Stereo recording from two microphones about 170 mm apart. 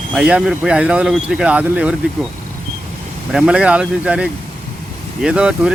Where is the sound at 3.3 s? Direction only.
5° right (ahead or behind).